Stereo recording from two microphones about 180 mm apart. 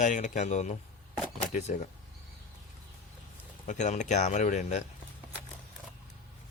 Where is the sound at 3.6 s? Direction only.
40° left (ahead or behind).